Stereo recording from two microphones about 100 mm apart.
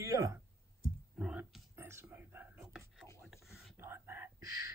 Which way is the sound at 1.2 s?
5° right (ahead or behind).